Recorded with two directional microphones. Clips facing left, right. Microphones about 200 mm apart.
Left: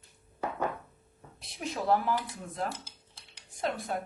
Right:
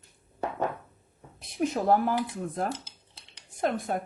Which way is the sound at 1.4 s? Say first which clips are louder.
Right 7 dB; 50° right (ahead or behind).